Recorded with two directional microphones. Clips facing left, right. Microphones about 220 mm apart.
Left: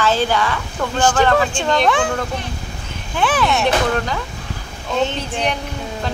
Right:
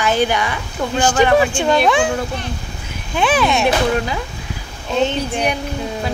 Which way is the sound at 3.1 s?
15° right (ahead or behind).